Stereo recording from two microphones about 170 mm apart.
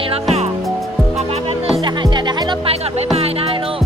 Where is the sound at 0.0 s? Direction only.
35° right (ahead or behind).